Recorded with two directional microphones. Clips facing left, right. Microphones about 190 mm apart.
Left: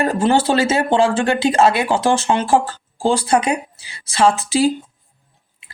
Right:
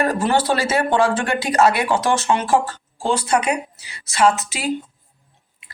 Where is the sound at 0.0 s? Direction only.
25° left (ahead or behind).